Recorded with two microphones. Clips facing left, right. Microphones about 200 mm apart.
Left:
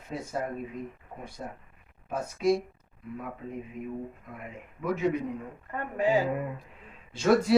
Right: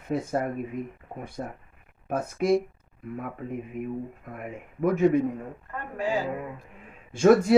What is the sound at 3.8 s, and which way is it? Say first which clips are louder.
A man's voice: right 4 dB; 55° right (ahead or behind).